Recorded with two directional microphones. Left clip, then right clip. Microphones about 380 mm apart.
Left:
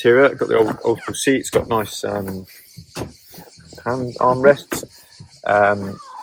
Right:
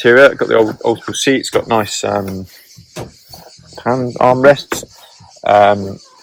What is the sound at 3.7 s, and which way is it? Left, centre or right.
Speech, right.